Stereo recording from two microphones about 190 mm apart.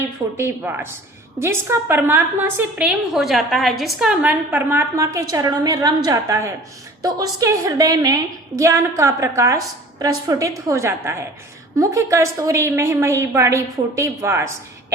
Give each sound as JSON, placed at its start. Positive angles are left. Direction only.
{"t": 0.0, "sound": "a woman's voice", "side_deg": -15}